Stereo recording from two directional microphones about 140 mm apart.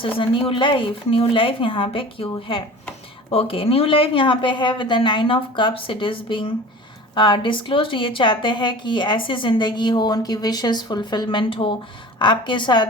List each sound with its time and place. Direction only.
0.0 s a woman's voice: 40° left (ahead or behind)